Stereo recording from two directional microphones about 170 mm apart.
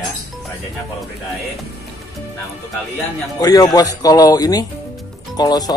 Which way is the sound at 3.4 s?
20° left (ahead or behind).